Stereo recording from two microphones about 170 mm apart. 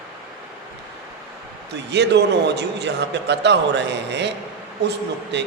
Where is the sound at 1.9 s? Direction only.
85° right.